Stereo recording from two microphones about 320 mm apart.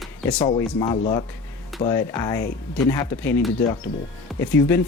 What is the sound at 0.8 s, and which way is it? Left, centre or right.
Speech, centre.